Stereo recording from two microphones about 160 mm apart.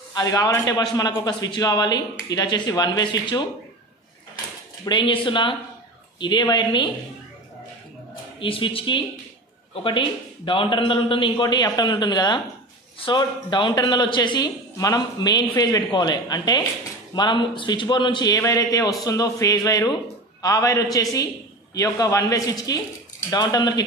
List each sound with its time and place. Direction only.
0.1 s a man's voice: 20° left (ahead or behind)
4.8 s a man's voice: 30° left (ahead or behind)
8.4 s a man's voice: 30° left (ahead or behind)